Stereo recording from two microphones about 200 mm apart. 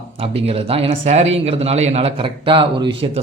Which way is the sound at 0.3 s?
30° right (ahead or behind).